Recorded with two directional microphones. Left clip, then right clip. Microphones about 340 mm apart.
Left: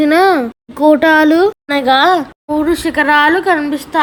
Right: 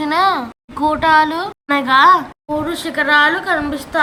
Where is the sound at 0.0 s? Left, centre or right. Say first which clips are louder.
Left 5 dB; centre.